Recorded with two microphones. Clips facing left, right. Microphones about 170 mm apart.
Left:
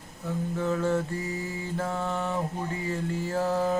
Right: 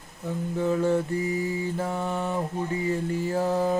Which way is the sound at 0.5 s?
20° right (ahead or behind).